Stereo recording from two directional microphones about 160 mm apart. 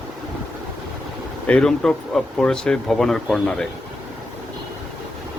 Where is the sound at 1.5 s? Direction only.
5° left (ahead or behind).